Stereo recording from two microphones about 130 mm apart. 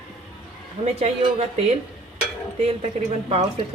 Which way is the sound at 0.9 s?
55° right (ahead or behind).